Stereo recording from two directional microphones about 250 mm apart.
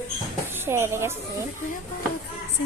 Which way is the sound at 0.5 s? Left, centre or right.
Centre.